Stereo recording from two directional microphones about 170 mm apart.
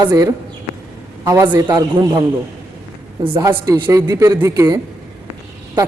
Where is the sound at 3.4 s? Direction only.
20° right (ahead or behind).